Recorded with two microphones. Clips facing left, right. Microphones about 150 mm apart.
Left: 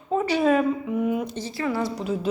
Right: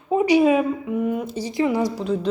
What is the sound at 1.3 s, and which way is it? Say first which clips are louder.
Speech: right 5 dB; 15° right (ahead or behind).